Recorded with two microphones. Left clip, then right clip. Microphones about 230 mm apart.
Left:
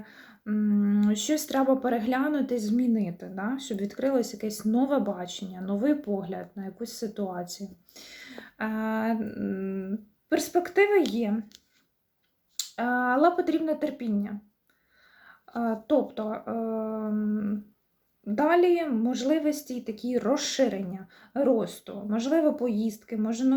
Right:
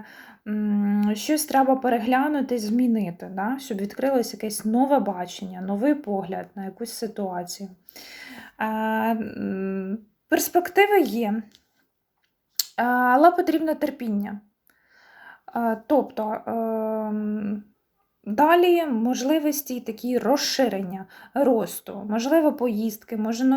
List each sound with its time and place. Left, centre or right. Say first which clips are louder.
0.0 s speech: right 3 dB; centre
12.5 s speech: right 6 dB; centre